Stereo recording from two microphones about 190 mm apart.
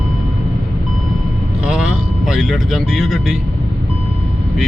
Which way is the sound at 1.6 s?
Centre (ahead or behind).